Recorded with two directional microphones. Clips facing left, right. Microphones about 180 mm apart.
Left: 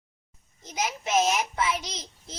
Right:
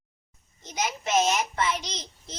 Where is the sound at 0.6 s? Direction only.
Centre (ahead or behind).